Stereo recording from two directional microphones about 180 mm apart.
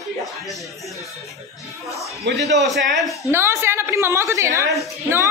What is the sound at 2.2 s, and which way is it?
Speech, 70° right (ahead or behind).